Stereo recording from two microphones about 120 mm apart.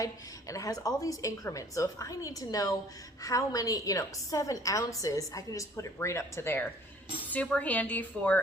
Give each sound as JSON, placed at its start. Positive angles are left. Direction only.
{"t": 0.0, "sound": "a woman's voice", "side_deg": 30}